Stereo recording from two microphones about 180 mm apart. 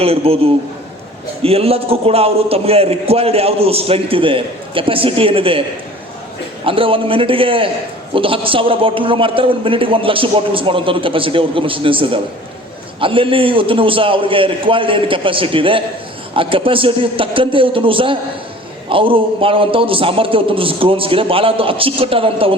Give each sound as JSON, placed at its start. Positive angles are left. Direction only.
{"t": 0.0, "sound": "a man's voice", "side_deg": -35}
{"t": 1.4, "sound": "a man's voice", "side_deg": -35}
{"t": 6.7, "sound": "a man's voice", "side_deg": -30}